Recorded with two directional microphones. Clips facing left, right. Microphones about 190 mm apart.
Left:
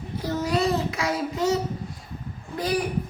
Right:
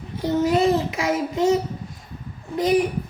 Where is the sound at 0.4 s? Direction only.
25° right (ahead or behind).